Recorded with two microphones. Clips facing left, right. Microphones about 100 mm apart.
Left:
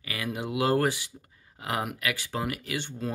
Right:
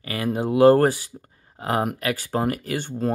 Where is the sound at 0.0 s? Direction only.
40° right (ahead or behind).